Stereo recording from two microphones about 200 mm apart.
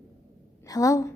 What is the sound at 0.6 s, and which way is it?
Speech, 15° left (ahead or behind).